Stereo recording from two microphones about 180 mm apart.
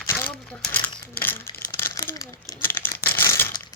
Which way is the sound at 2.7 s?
10° left (ahead or behind).